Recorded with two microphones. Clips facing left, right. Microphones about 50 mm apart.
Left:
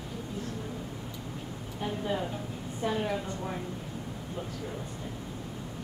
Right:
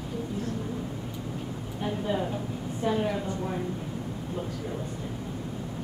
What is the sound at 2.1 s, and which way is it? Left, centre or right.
A woman's voice, centre.